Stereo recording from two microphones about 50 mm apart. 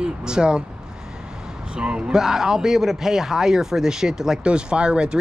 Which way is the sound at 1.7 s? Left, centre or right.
Centre.